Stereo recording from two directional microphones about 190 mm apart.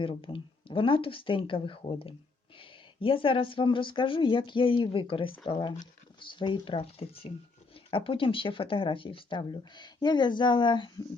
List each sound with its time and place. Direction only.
0.0 s speech: 25° left (ahead or behind)